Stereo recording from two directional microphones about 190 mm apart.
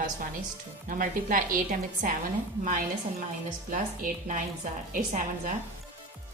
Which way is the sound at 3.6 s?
45° right (ahead or behind).